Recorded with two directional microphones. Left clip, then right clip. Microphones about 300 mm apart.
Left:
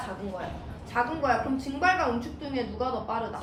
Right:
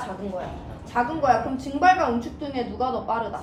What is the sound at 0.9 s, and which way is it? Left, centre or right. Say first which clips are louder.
A woman's voice: right 5 dB; right.